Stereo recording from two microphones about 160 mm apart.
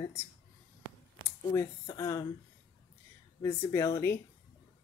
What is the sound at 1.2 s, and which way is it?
Speech, 20° left (ahead or behind).